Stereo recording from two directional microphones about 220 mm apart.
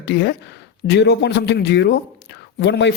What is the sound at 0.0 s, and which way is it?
A man's voice, 50° left (ahead or behind).